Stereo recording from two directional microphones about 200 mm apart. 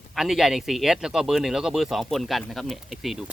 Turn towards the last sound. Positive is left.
turn(degrees=0)  # may be behind; listen again after turning